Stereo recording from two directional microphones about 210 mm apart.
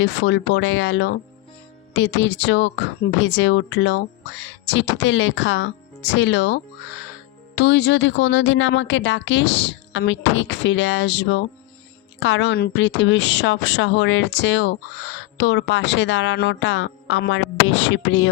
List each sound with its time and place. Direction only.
0.0 s speech: 55° left (ahead or behind)